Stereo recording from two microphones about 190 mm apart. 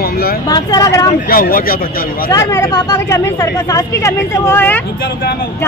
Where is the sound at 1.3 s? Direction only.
50° left (ahead or behind).